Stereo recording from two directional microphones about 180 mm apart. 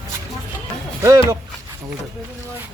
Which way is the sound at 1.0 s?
15° right (ahead or behind).